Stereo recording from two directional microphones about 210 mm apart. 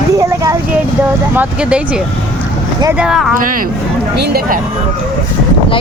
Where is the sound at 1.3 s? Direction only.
5° right (ahead or behind).